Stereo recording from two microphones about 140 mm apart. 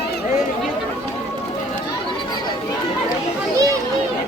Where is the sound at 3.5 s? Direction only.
25° right (ahead or behind).